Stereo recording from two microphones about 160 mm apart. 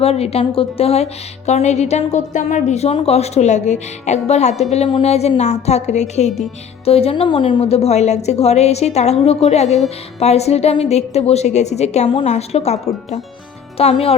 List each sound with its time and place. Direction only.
0.0 s a woman's voice: 40° left (ahead or behind)